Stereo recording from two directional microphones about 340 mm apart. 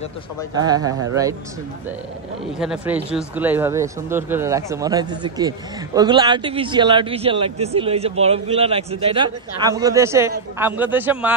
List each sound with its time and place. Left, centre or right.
0.6 s a man's voice: centre
2.6 s a man's voice: centre